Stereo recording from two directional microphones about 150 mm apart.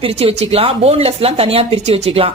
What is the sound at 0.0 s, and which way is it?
Speech, 45° right (ahead or behind).